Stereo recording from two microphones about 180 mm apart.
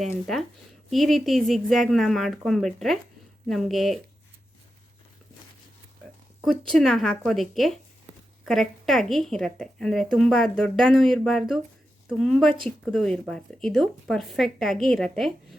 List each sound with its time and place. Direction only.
0.9 s speech: centre (ahead or behind)
6.7 s speech: centre (ahead or behind)